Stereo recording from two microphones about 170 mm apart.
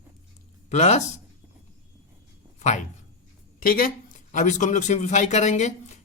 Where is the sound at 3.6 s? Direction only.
55° left (ahead or behind).